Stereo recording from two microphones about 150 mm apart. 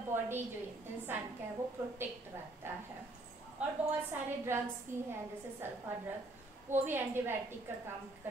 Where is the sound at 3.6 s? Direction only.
15° right (ahead or behind).